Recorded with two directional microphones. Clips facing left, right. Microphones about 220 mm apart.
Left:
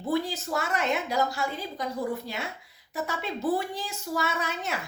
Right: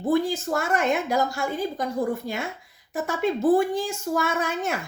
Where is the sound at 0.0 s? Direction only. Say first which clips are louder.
Right 6 dB; 50° right (ahead or behind).